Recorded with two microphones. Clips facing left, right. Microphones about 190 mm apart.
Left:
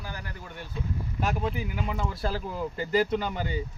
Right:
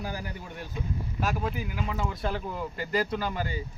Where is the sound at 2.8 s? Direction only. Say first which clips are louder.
Left 4 dB; 25° left (ahead or behind).